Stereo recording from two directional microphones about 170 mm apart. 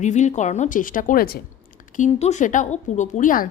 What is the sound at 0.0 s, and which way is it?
A woman's voice, 45° left (ahead or behind).